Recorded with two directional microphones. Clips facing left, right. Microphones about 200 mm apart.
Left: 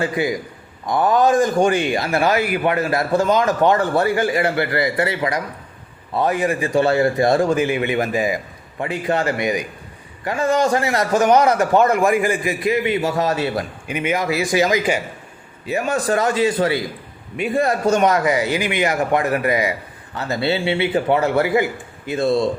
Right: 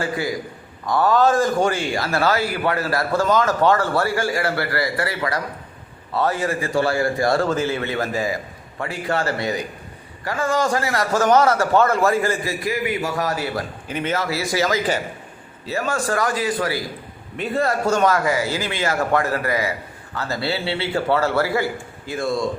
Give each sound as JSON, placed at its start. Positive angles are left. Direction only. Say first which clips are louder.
{"t": 0.0, "sound": "speech", "louder": "left 3 dB", "side_deg": 20}
{"t": 13.8, "sound": "speech", "louder": "left 3 dB", "side_deg": 10}
{"t": 17.3, "sound": "speech", "louder": "left 2 dB", "side_deg": 15}